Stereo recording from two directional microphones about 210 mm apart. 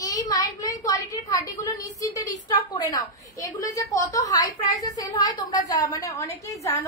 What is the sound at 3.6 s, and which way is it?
A woman's voice, 15° left (ahead or behind).